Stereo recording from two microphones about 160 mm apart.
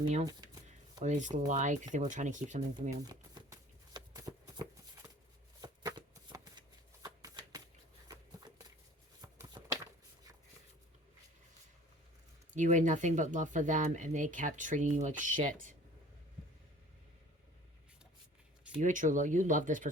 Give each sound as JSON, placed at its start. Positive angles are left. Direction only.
{"t": 0.3, "sound": "shuffling cards", "side_deg": -25}
{"t": 1.0, "sound": "speech", "side_deg": -50}
{"t": 3.1, "sound": "shuffling cards", "side_deg": -25}
{"t": 8.0, "sound": "a sound", "side_deg": -25}
{"t": 12.5, "sound": "speech", "side_deg": -50}
{"t": 18.8, "sound": "speech", "side_deg": -50}